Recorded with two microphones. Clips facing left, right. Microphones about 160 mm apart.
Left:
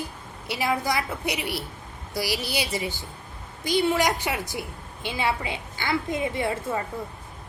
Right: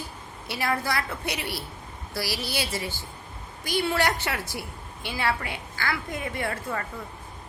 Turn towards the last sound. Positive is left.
turn(degrees=20)  # may be behind; listen again after turning